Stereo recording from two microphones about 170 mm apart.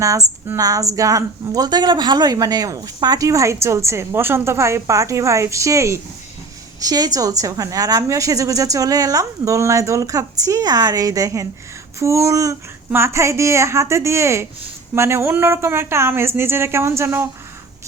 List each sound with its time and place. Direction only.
0.0 s a woman's voice: 20° right (ahead or behind)